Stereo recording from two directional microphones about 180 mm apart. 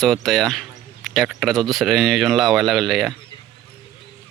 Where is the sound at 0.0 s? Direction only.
Centre (ahead or behind).